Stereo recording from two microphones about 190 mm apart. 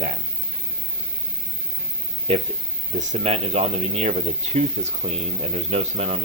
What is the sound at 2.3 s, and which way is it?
Speech, 30° right (ahead or behind).